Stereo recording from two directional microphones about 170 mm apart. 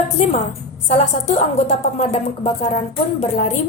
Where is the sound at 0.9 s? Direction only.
40° left (ahead or behind).